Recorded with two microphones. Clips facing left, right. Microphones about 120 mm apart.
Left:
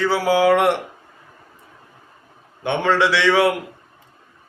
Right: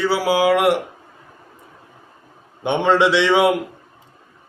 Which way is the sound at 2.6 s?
20° right (ahead or behind).